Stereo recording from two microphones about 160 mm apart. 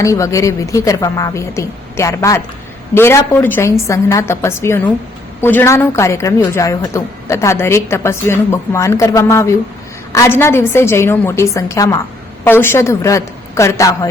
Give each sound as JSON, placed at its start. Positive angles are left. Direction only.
{"t": 0.0, "sound": "a woman's voice", "side_deg": 20}